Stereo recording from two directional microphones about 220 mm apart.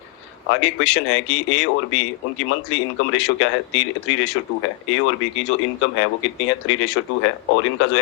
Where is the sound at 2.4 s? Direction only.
60° left (ahead or behind).